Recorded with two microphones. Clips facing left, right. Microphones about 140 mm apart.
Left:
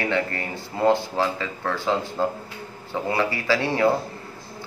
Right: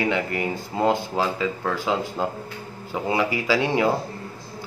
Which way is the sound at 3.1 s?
15° right (ahead or behind).